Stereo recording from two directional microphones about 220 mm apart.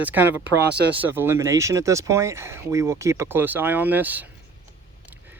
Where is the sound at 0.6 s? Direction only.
50° right (ahead or behind).